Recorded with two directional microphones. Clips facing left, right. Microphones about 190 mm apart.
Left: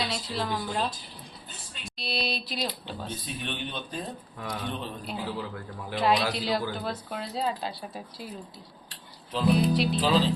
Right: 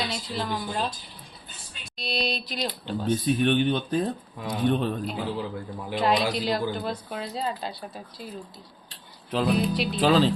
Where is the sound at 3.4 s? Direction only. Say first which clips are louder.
Right 12 dB; 60° right (ahead or behind).